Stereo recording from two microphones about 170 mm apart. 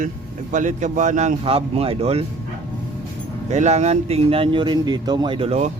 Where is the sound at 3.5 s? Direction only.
40° right (ahead or behind).